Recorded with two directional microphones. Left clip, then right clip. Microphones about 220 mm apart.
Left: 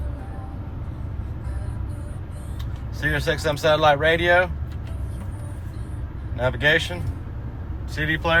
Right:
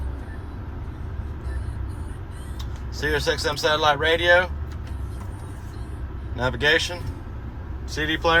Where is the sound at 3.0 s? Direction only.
20° right (ahead or behind).